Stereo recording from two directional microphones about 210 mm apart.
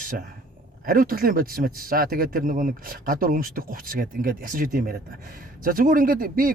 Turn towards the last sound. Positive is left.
turn(degrees=-40)  # may be behind; listen again after turning